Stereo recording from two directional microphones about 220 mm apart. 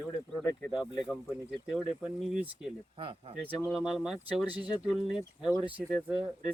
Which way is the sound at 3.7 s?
Centre (ahead or behind).